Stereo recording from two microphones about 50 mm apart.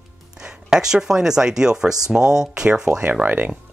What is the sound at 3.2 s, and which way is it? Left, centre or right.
Speech, right.